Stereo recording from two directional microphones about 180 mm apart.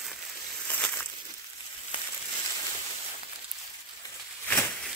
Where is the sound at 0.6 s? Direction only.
5° left (ahead or behind).